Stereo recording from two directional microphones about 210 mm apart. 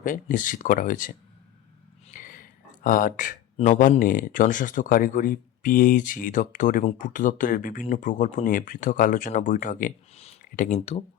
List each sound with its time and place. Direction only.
0.0 s speech: 40° left (ahead or behind)
2.1 s speech: 40° left (ahead or behind)